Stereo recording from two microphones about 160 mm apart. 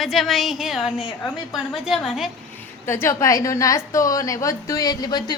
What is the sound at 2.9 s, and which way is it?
A woman's voice, 15° left (ahead or behind).